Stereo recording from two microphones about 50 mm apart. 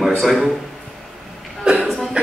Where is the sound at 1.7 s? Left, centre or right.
Centre.